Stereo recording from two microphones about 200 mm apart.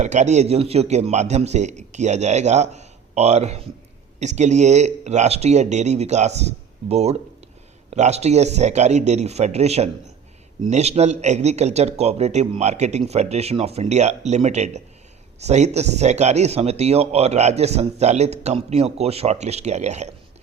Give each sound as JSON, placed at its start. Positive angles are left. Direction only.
{"t": 0.0, "sound": "speech", "side_deg": -35}